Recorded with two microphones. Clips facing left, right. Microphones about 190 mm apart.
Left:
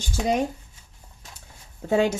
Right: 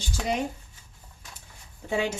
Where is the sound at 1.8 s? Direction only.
45° left (ahead or behind).